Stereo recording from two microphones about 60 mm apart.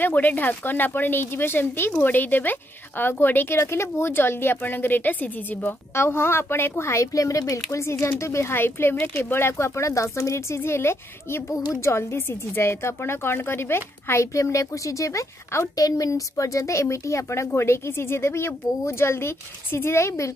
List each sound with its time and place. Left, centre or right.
0.0 s speech: left
5.9 s a woman's voice: left
6.8 s a woman's voice: left